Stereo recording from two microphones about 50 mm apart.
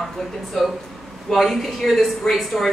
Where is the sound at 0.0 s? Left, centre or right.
Centre.